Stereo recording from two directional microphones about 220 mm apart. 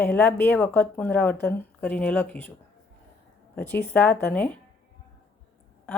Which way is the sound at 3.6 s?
10° left (ahead or behind).